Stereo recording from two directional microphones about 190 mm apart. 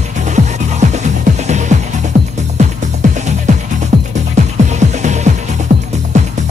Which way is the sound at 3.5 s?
40° right (ahead or behind).